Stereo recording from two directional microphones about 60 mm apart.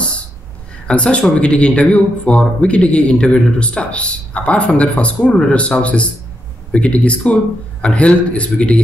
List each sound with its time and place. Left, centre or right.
0.8 s a man's voice: centre